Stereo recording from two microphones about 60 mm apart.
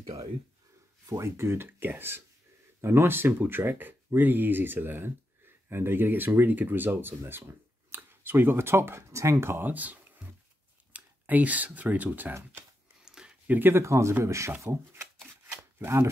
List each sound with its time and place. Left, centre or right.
1.0 s speech: right
13.0 s a sound: centre
13.5 s speech: right
13.7 s speech: right
15.8 s speech: right